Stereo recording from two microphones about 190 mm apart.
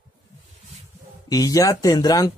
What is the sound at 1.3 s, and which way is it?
Speech, 15° left (ahead or behind).